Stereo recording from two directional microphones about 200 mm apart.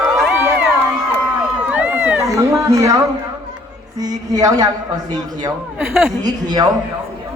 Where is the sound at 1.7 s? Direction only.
10° right (ahead or behind).